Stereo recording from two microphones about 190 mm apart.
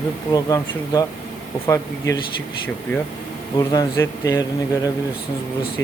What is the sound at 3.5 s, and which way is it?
Speech, 20° left (ahead or behind).